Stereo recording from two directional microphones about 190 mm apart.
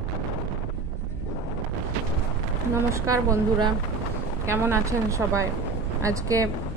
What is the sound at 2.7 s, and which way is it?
A woman's voice, 15° right (ahead or behind).